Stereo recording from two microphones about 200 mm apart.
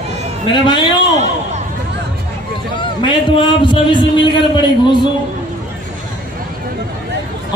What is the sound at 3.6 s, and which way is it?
A man's voice, 25° left (ahead or behind).